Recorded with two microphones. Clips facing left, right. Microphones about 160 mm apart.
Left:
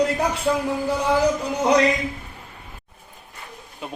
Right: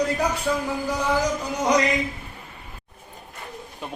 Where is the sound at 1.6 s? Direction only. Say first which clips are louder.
Left 2 dB; 60° left (ahead or behind).